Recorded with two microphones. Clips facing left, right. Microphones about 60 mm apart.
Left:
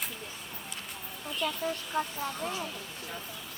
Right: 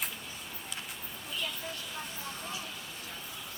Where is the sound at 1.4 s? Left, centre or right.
Left.